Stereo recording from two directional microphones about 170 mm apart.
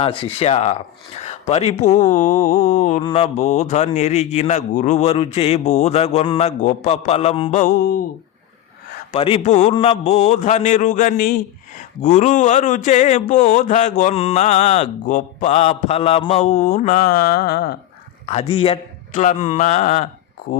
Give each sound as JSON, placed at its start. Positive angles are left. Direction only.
{"t": 0.0, "sound": "a man's voice", "side_deg": 30}
{"t": 3.0, "sound": "speech", "side_deg": 35}
{"t": 7.6, "sound": "mantra", "side_deg": 60}
{"t": 9.1, "sound": "a man's voice", "side_deg": 35}
{"t": 9.7, "sound": "a man's voice", "side_deg": 35}
{"t": 18.3, "sound": "a man's voice", "side_deg": 35}
{"t": 19.2, "sound": "a man's voice", "side_deg": 45}